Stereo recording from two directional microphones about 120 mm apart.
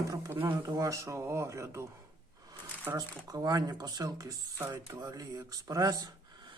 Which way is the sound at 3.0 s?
35° right (ahead or behind).